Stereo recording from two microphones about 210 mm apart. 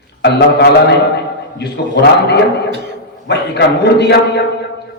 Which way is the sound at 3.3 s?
50° left (ahead or behind).